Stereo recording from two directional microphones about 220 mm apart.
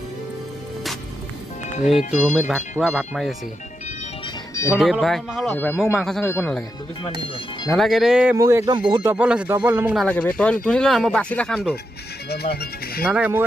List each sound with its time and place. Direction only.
2.1 s speech: 5° right (ahead or behind)
4.7 s speech: centre (ahead or behind)
7.7 s speech: centre (ahead or behind); by 9.1 s 20° right (ahead or behind)
9.1 s speech: 5° right (ahead or behind)
12.3 s speech: 45° left (ahead or behind)
13.1 s speech: 5° right (ahead or behind)